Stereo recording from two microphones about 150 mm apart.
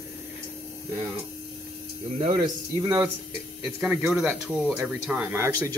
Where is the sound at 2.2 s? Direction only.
65° right (ahead or behind).